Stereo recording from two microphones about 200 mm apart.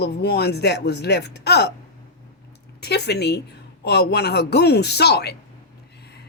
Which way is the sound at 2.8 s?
55° left (ahead or behind).